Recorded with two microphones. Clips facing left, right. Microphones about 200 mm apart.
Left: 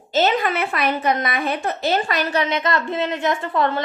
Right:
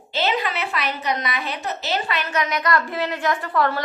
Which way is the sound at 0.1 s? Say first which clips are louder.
Left 5 dB; 45° left (ahead or behind).